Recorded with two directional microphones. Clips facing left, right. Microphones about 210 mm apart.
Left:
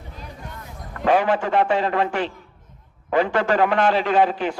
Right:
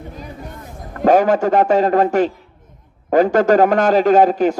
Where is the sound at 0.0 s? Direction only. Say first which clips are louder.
Right 6 dB; 50° right (ahead or behind).